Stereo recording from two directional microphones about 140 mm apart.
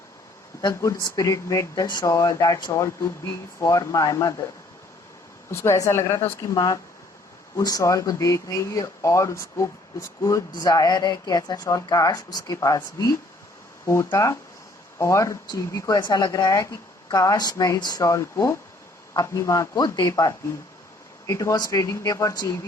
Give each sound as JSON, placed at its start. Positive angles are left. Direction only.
{"t": 0.6, "sound": "speech", "side_deg": 25}
{"t": 5.5, "sound": "speech", "side_deg": 20}